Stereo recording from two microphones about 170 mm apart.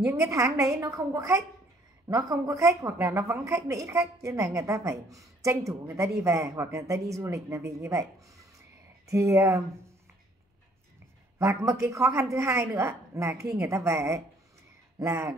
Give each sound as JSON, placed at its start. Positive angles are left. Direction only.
{"t": 0.0, "sound": "a woman's voice", "side_deg": -20}
{"t": 11.3, "sound": "a woman's voice", "side_deg": -20}